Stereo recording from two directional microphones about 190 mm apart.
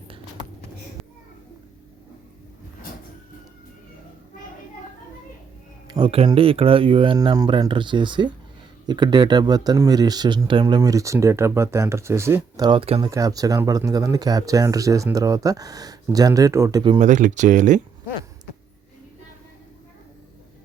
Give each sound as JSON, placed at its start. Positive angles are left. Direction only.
{"t": 5.9, "sound": "speech", "side_deg": -30}
{"t": 13.0, "sound": "speech", "side_deg": -20}
{"t": 17.0, "sound": "speech", "side_deg": -40}